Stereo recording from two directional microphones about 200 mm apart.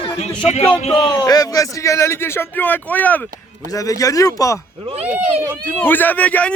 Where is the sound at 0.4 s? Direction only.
30° left (ahead or behind).